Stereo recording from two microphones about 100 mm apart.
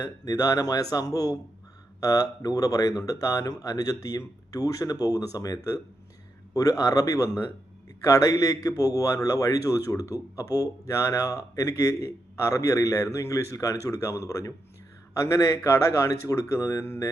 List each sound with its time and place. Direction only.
0.0 s a man's voice: 40° left (ahead or behind)